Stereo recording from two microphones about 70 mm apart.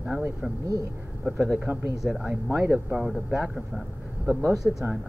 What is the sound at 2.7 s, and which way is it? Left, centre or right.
Speech, centre.